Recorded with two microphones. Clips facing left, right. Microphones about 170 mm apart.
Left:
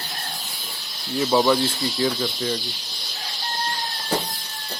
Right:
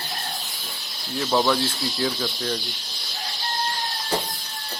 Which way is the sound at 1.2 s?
5° left (ahead or behind).